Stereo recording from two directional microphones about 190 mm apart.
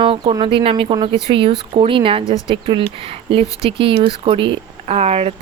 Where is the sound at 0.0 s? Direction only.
30° right (ahead or behind).